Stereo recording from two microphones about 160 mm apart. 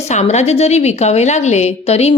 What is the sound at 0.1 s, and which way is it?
A woman's voice, 45° left (ahead or behind).